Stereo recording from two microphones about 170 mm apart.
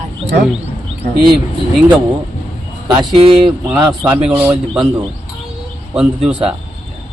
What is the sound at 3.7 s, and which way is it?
Speech, 10° right (ahead or behind).